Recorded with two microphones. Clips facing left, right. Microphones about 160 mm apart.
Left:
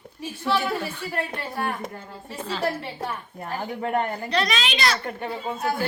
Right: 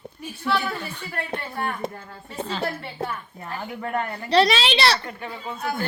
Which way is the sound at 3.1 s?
35° left (ahead or behind).